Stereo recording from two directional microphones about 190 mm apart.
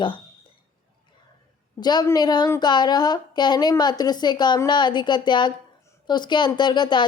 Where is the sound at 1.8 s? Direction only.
20° left (ahead or behind).